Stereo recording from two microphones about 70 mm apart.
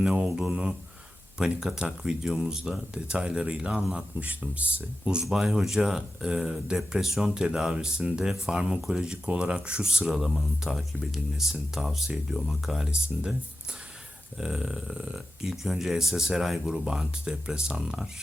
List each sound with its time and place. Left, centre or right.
0.0 s speech: centre
0.4 s mantra: centre
1.4 s speech: centre
5.2 s speech: centre
14.3 s speech: centre